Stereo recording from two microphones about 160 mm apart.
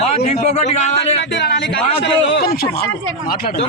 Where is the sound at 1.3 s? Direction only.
90° left; by 2.8 s 70° left (ahead or behind).